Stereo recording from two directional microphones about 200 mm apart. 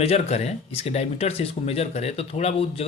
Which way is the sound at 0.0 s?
30° left (ahead or behind).